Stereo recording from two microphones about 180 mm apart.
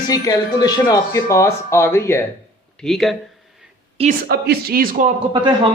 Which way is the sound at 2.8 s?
Centre (ahead or behind).